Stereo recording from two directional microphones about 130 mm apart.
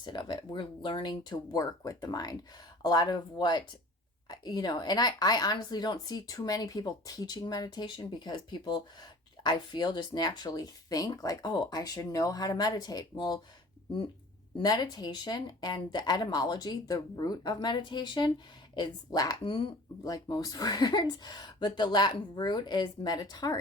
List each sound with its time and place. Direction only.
0.0 s a woman's voice: 35° left (ahead or behind)
14.5 s a woman's voice: 35° left (ahead or behind)
19.4 s speech: 45° left (ahead or behind)
20.1 s a woman's voice: 30° left (ahead or behind)